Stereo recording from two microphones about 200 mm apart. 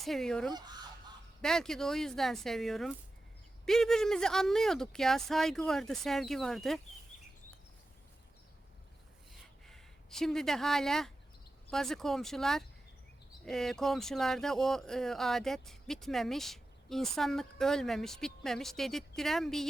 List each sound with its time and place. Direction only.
0.0 s speech: centre (ahead or behind)
0.5 s goose: 20° right (ahead or behind)
1.4 s speech: centre (ahead or behind)
9.3 s a sound: centre (ahead or behind)
11.7 s speech: centre (ahead or behind)